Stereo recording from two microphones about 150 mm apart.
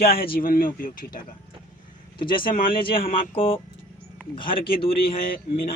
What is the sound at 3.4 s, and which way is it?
Speech, 35° left (ahead or behind).